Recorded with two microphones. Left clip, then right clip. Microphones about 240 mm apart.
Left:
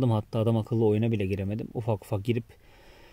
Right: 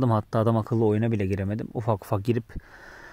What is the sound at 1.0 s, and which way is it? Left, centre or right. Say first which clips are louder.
Speech: right 2 dB; right.